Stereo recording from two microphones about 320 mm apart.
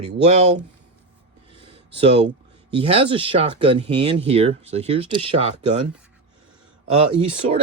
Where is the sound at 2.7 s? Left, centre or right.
Centre.